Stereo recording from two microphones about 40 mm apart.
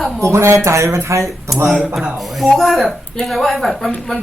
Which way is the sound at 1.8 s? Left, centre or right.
Centre.